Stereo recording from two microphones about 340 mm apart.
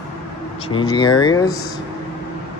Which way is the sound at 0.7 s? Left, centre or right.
Centre.